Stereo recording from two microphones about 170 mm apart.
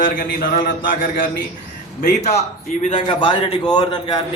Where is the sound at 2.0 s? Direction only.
40° left (ahead or behind).